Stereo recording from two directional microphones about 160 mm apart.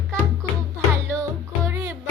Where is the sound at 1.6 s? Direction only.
20° right (ahead or behind).